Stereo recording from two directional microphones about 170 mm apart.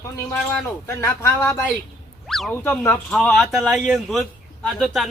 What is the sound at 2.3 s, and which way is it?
Speech, centre (ahead or behind).